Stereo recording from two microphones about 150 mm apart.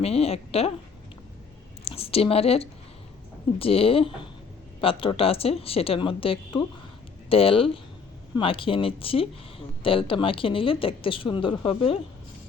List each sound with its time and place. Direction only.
0.0 s a woman's voice: 40° left (ahead or behind)
1.8 s speech: 40° left (ahead or behind)